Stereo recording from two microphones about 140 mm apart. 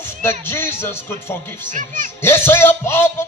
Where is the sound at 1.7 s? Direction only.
65° right (ahead or behind).